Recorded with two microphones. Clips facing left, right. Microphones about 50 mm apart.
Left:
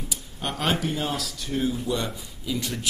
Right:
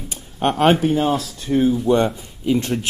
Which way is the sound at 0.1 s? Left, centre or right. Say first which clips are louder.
Right 14 dB; right.